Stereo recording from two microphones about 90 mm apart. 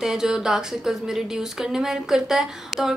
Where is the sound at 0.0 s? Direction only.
5° right (ahead or behind).